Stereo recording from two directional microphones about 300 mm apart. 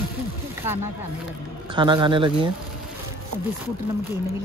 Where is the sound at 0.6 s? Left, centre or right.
Centre.